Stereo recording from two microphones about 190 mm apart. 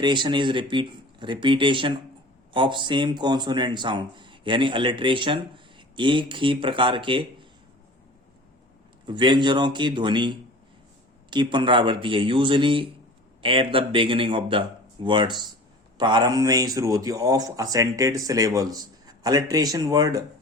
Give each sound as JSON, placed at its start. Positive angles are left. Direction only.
{"t": 0.0, "sound": "speech", "side_deg": -25}
{"t": 9.0, "sound": "speech", "side_deg": -25}